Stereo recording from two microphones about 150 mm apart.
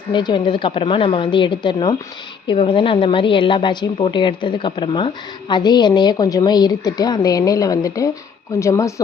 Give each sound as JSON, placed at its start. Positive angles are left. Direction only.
{"t": 0.1, "sound": "a woman's voice", "side_deg": 30}